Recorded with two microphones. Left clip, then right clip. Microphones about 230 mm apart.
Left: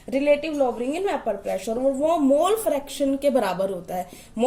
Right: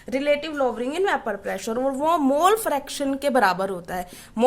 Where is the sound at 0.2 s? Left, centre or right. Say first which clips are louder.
Left 2 dB; right.